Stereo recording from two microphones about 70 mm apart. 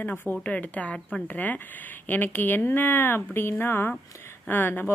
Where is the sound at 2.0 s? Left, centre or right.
Left.